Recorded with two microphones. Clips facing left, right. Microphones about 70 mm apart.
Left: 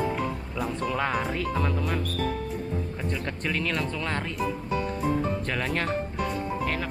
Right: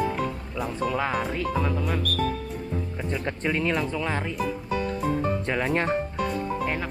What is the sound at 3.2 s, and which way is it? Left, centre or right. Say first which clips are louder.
Speech: right 5 dB; right.